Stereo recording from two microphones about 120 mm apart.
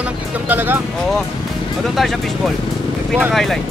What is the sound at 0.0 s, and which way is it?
Speech, 15° right (ahead or behind).